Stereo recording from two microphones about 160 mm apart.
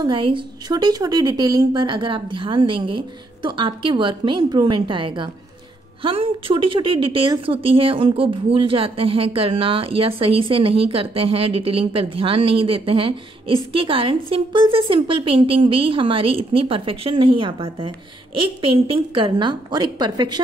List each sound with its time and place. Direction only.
0.0 s a woman's voice: 30° right (ahead or behind)